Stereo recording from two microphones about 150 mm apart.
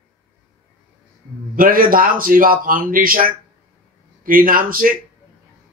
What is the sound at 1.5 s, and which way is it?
Speech, 70° right (ahead or behind).